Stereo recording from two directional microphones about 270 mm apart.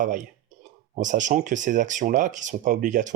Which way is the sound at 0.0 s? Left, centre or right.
Right.